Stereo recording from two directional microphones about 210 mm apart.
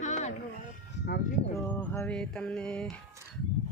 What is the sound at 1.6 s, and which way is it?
Speech, 5° left (ahead or behind).